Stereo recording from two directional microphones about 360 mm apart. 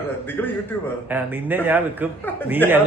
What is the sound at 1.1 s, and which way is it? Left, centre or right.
Speech, centre.